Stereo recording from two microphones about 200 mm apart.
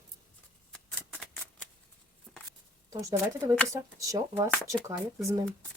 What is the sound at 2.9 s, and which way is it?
Speech, 15° right (ahead or behind).